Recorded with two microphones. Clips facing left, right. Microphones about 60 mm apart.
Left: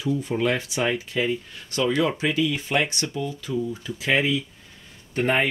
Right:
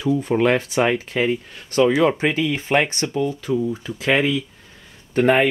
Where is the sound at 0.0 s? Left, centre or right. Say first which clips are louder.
Right 6 dB; right.